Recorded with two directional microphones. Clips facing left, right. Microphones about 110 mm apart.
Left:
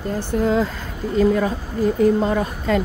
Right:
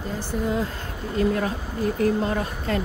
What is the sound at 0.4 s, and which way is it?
Speech, 90° left.